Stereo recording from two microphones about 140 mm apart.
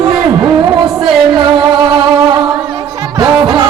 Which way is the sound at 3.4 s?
25° right (ahead or behind).